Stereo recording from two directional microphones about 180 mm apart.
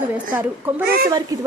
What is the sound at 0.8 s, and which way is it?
Speech, 60° right (ahead or behind).